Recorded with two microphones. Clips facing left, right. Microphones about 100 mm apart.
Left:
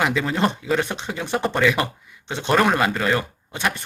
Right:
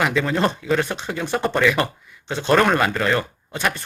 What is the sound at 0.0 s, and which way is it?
Speech, 20° left (ahead or behind).